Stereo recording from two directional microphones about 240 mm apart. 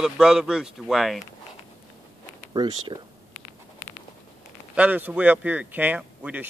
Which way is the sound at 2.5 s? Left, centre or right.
Centre.